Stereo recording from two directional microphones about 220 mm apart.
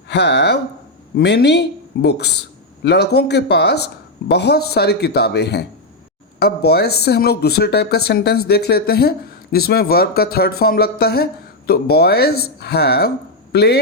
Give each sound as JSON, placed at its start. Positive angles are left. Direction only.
{"t": 0.1, "sound": "speech", "side_deg": 50}